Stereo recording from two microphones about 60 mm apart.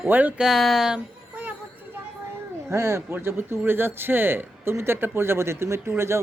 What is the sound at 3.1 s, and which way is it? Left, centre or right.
Speech, right.